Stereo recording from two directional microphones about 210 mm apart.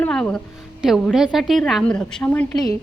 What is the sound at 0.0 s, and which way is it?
A woman's voice, 5° left (ahead or behind).